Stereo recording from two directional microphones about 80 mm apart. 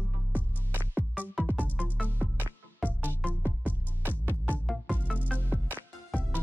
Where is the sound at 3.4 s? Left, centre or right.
Right.